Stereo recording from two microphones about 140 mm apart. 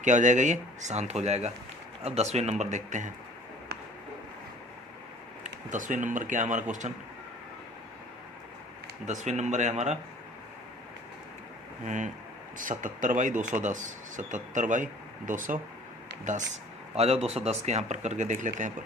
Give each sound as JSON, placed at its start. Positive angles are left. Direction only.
{"t": 0.0, "sound": "speech", "side_deg": -60}
{"t": 5.4, "sound": "speech", "side_deg": -65}
{"t": 9.0, "sound": "speech", "side_deg": -55}
{"t": 11.9, "sound": "speech", "side_deg": -60}
{"t": 17.0, "sound": "speech", "side_deg": -45}